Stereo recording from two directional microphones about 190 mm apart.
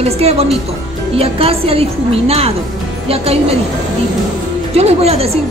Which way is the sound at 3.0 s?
30° right (ahead or behind).